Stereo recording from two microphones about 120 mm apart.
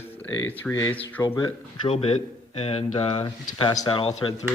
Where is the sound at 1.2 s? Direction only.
40° left (ahead or behind).